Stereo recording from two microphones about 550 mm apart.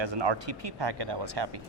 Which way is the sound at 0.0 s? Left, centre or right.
Right.